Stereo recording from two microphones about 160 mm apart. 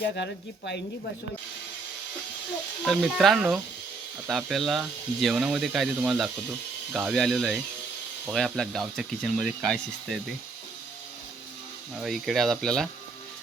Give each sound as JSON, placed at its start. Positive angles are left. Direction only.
{"t": 0.0, "sound": "speech", "side_deg": 90}
{"t": 2.8, "sound": "speech", "side_deg": 0}
{"t": 11.9, "sound": "speech", "side_deg": 0}